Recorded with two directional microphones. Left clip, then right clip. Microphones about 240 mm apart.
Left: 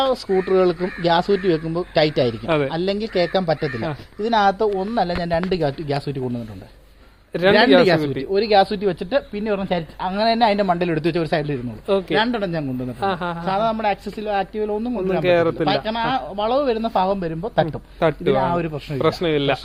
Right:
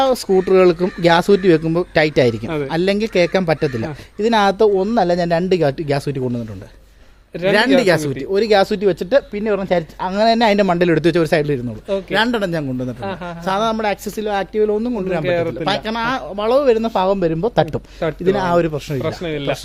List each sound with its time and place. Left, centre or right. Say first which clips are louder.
0.0 s speech: right 4 dB; right
7.3 s speech: left 2 dB; centre
7.9 s speech: right 2 dB; right
13.0 s speech: left 4 dB; centre
13.4 s speech: right 3 dB; right
15.2 s speech: left 3 dB; centre
15.6 s speech: right 1 dB; right
18.0 s speech: left 3 dB; left
18.3 s speech: right 4 dB; right
19.0 s speech: left 5 dB; left